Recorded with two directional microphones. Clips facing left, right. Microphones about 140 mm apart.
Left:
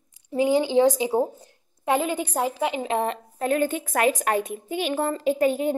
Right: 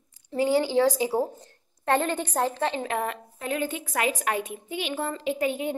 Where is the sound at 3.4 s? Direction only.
45° left (ahead or behind).